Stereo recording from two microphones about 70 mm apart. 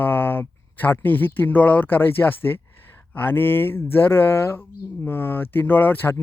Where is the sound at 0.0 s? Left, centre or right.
Left.